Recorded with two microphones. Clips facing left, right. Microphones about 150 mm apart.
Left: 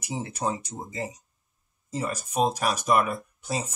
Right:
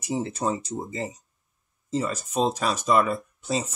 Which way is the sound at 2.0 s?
15° left (ahead or behind).